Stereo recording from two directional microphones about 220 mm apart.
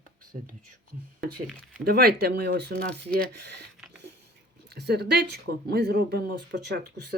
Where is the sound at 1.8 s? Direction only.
45° right (ahead or behind).